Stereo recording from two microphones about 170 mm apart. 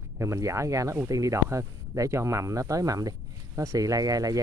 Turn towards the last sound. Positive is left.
turn(degrees=-20)  # may be behind; listen again after turning